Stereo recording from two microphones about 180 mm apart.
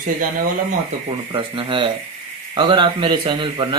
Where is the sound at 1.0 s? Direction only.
30° right (ahead or behind).